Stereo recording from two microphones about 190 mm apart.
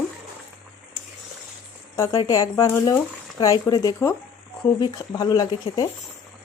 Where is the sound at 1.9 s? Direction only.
15° left (ahead or behind).